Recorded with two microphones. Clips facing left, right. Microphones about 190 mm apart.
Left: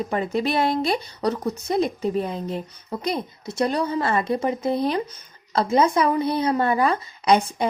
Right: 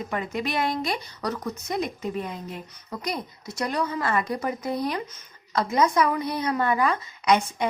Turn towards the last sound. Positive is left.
turn(degrees=30)  # may be behind; listen again after turning